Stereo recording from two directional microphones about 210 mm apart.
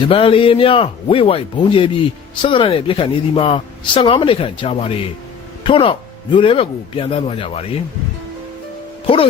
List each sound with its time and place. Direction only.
0.1 s speech: 25° left (ahead or behind)
9.0 s speech: 25° left (ahead or behind)